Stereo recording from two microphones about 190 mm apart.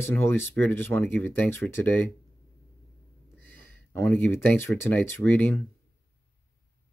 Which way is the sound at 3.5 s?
10° left (ahead or behind).